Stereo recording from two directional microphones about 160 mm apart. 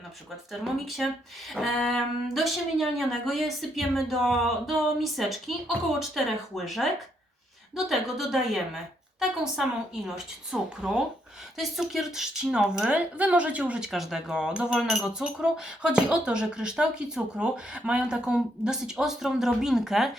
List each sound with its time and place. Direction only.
0.5 s speech: centre (ahead or behind)